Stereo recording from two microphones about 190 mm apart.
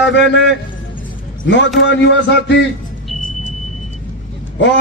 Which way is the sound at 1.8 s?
75° left (ahead or behind).